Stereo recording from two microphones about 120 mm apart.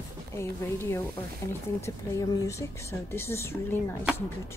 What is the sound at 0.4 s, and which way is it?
A woman's voice, 20° left (ahead or behind).